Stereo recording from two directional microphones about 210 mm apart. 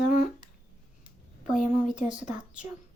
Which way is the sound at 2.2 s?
35° left (ahead or behind).